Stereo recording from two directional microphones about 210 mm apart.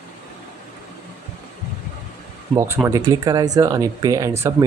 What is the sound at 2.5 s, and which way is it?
Speech, 10° right (ahead or behind).